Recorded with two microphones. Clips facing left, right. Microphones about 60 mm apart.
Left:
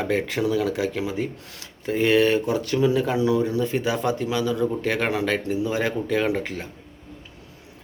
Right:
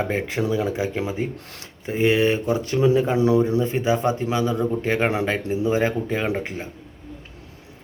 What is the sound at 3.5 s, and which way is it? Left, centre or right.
Speech, right.